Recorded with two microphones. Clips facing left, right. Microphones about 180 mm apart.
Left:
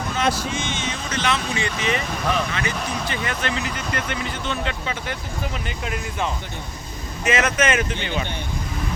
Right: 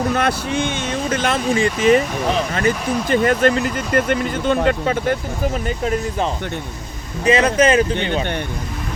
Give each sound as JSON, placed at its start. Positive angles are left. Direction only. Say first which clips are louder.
{"t": 0.1, "sound": "speech", "louder": "right 4 dB", "side_deg": -60}
{"t": 7.3, "sound": "speech", "louder": "right 6 dB", "side_deg": -35}